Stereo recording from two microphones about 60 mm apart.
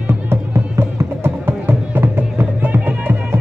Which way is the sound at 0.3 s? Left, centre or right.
Right.